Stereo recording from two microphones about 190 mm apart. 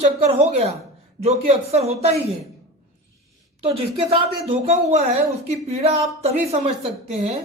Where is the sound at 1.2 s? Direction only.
35° right (ahead or behind).